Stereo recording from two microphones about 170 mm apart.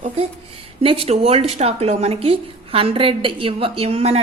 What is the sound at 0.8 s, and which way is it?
A woman's voice, 35° right (ahead or behind).